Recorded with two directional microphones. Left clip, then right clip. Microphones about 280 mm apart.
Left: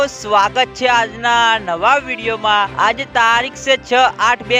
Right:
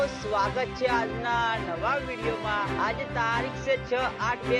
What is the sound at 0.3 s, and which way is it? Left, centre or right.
Speech, left.